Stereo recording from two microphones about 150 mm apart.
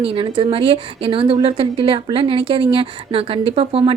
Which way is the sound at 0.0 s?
35° right (ahead or behind).